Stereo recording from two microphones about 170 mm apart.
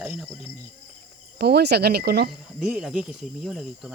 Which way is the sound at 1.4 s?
75° right (ahead or behind).